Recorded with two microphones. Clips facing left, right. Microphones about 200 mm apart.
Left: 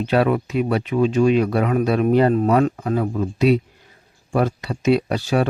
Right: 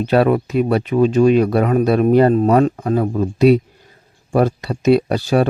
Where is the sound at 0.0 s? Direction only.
40° right (ahead or behind).